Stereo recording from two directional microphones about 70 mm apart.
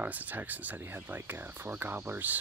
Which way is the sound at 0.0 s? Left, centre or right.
Right.